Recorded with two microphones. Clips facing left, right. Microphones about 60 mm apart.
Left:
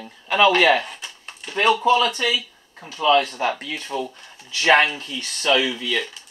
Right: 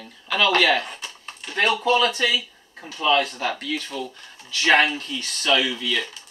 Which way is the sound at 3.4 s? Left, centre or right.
Left.